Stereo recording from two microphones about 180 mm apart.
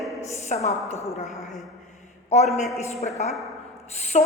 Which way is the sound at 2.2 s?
35° left (ahead or behind).